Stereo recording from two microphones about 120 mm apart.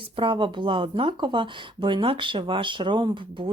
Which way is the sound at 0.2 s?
45° right (ahead or behind).